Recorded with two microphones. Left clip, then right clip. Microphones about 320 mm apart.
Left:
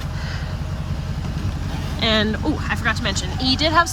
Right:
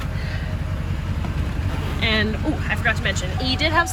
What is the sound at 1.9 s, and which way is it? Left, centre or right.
Speech, centre.